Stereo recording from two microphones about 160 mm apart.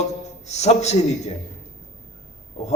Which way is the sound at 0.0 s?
45° left (ahead or behind).